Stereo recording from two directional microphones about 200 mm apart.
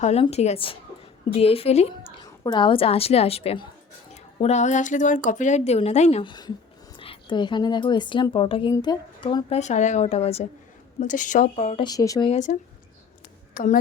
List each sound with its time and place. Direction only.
0.0 s a woman's voice: 30° left (ahead or behind)
11.8 s a woman's voice: 20° left (ahead or behind)
12.3 s a woman's voice: 35° left (ahead or behind)